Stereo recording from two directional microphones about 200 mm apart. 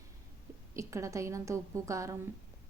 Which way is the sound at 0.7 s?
15° right (ahead or behind).